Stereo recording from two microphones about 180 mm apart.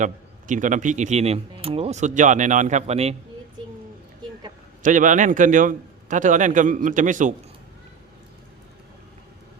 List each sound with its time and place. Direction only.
0.0 s speech: 45° right (ahead or behind)
4.8 s a man's voice: 45° right (ahead or behind)